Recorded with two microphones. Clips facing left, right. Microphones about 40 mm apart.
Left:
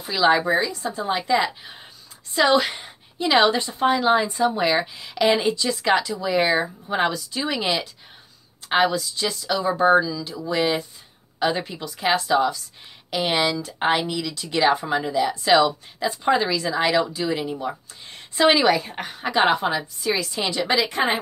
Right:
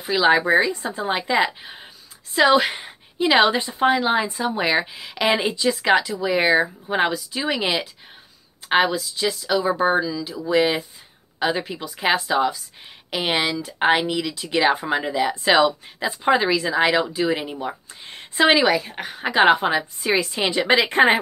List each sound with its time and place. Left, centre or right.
0.0 s a woman's voice: centre
18.6 s a woman's voice: centre
19.2 s a woman's voice: centre; by 21.2 s right